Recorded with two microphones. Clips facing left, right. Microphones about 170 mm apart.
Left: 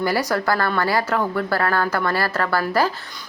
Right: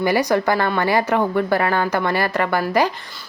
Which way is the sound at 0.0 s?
20° right (ahead or behind).